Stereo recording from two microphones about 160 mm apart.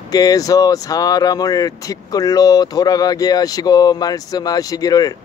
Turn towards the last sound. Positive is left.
turn(degrees=20)  # may be behind; listen again after turning